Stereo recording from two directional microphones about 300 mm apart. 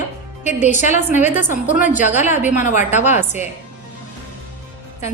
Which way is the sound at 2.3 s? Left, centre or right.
Centre.